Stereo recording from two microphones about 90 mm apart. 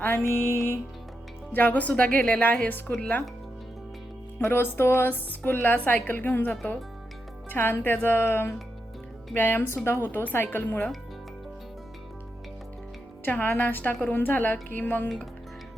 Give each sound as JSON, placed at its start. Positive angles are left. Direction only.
{"t": 0.0, "sound": "music", "side_deg": 25}
{"t": 1.5, "sound": "a woman's voice", "side_deg": 20}
{"t": 4.4, "sound": "a woman's voice", "side_deg": 25}
{"t": 7.5, "sound": "a woman's voice", "side_deg": 25}
{"t": 13.2, "sound": "a woman's voice", "side_deg": 20}